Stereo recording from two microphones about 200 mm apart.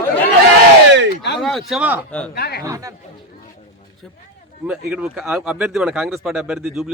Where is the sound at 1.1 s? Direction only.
60° left (ahead or behind).